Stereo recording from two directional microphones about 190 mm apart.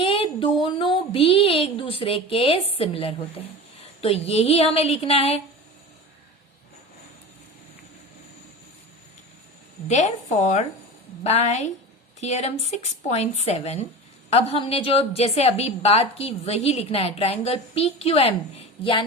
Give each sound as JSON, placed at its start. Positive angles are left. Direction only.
{"t": 0.0, "sound": "a sound", "side_deg": 30}
{"t": 0.6, "sound": "a woman's voice", "side_deg": 25}
{"t": 9.9, "sound": "a woman's voice", "side_deg": 40}